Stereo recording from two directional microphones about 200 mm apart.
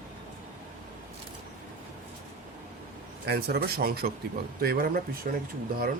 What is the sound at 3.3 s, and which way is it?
Speech, 50° right (ahead or behind).